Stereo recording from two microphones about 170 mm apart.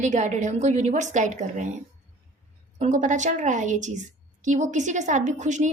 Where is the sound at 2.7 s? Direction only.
45° right (ahead or behind).